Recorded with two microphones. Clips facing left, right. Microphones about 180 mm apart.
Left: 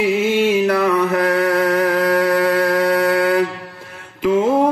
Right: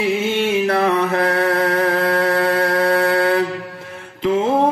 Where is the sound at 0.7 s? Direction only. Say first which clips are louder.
Left 1 dB; 30° right (ahead or behind).